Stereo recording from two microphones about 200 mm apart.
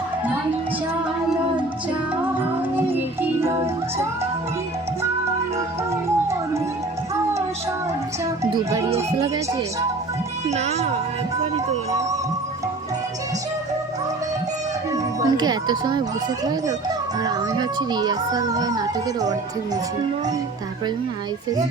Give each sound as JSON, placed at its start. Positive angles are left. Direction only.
{"t": 2.7, "sound": "music", "side_deg": -10}
{"t": 10.5, "sound": "speech", "side_deg": -35}
{"t": 14.9, "sound": "a child's voice", "side_deg": -20}
{"t": 17.2, "sound": "a child's voice", "side_deg": -20}